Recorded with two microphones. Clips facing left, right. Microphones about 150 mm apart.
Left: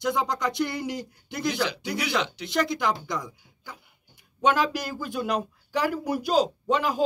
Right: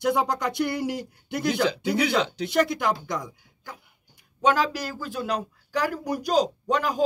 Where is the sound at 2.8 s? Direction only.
Centre (ahead or behind).